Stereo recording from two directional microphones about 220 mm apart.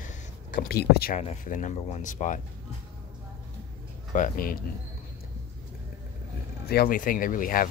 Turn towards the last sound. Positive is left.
turn(degrees=40)  # may be behind; listen again after turning